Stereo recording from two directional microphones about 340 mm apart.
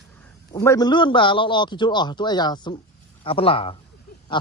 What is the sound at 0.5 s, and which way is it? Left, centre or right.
A man's voice, centre.